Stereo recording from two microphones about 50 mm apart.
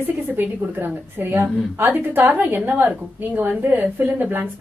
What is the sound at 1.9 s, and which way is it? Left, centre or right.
A woman's voice, right.